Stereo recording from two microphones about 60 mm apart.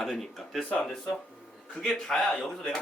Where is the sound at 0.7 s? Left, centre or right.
Centre.